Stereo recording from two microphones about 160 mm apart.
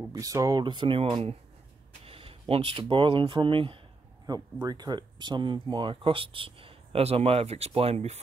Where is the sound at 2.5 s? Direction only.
35° right (ahead or behind).